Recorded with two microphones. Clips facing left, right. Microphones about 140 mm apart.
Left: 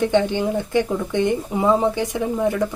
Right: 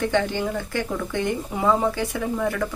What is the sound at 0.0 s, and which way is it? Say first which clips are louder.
A woman's voice: left 4 dB; 20° left (ahead or behind).